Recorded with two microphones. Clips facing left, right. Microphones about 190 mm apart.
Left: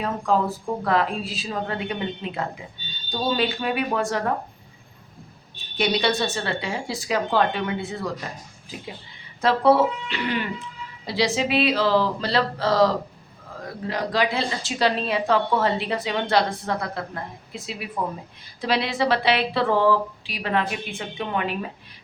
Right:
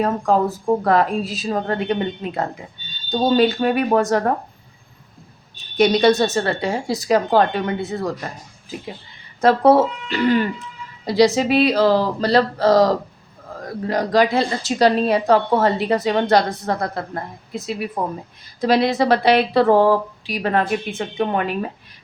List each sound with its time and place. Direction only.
0.3 s speech: 45° right (ahead or behind)
5.7 s speech: 45° right (ahead or behind)
9.4 s speech: 45° right (ahead or behind)